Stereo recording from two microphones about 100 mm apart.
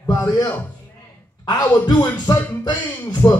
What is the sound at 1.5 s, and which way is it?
Speech, 45° left (ahead or behind).